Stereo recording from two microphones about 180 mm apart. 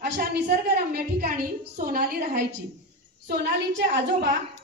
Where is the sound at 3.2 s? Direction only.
65° right (ahead or behind).